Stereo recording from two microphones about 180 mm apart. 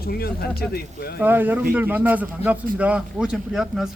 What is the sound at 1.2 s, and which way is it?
Speech, 10° right (ahead or behind).